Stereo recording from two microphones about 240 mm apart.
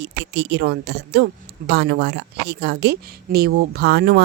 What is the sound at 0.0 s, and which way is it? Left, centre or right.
A woman's voice, right.